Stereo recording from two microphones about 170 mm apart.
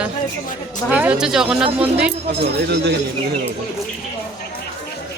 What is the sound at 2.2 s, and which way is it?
Speech, 80° right.